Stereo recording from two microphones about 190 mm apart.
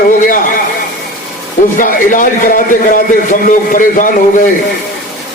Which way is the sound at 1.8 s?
45° left (ahead or behind).